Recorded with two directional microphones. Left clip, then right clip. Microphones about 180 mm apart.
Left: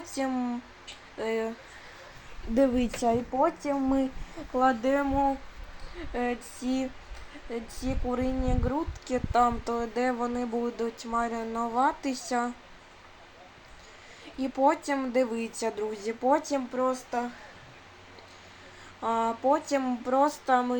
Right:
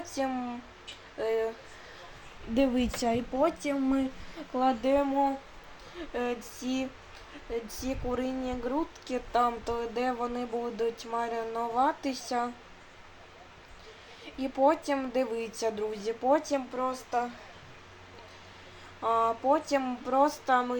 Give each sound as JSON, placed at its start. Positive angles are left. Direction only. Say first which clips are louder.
{"t": 0.0, "sound": "speech", "louder": "left 1 dB", "side_deg": 20}
{"t": 2.7, "sound": "speech", "louder": "left 2 dB", "side_deg": -20}
{"t": 4.5, "sound": "speech", "louder": "left 1 dB", "side_deg": 5}
{"t": 6.1, "sound": "speech", "louder": "left 2 dB", "side_deg": 10}
{"t": 14.3, "sound": "speech", "louder": "left 1 dB", "side_deg": 15}
{"t": 19.0, "sound": "speech", "louder": "even", "side_deg": 15}